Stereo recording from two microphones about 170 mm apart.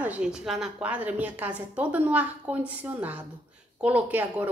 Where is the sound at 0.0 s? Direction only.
5° right (ahead or behind).